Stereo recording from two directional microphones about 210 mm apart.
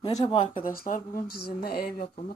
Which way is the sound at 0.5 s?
40° left (ahead or behind).